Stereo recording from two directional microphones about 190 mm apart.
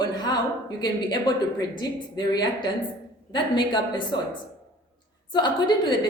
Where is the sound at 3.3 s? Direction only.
25° left (ahead or behind).